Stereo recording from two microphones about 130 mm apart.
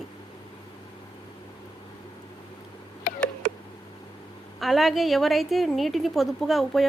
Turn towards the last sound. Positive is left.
turn(degrees=0)  # may be behind; listen again after turning